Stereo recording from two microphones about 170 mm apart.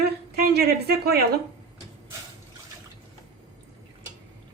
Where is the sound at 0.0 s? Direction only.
70° right (ahead or behind).